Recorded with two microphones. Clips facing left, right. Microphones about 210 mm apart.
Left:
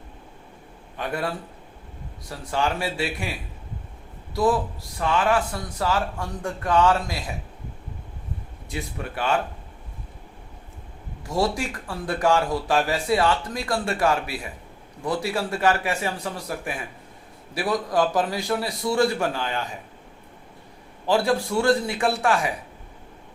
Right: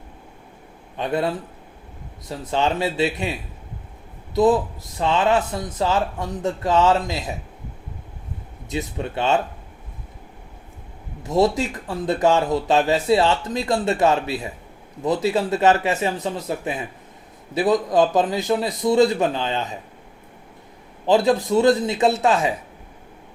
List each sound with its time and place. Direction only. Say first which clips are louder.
0.9 s speech: right 5 dB; 20° right (ahead or behind)
4.4 s speech: right 5 dB; 20° right (ahead or behind)
8.7 s speech: right 5 dB; 25° right (ahead or behind)
11.2 s speech: right 6 dB; 20° right (ahead or behind)
21.1 s speech: right 4 dB; 20° right (ahead or behind)